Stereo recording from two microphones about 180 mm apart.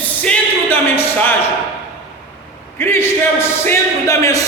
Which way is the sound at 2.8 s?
15° left (ahead or behind).